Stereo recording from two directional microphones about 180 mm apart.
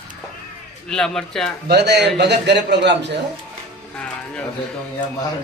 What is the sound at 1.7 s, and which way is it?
A man's voice, 65° right (ahead or behind).